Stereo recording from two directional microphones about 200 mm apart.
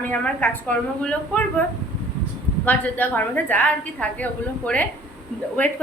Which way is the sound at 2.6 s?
10° left (ahead or behind).